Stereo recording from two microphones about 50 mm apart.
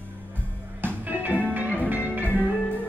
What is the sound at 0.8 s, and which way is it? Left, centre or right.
Music, right.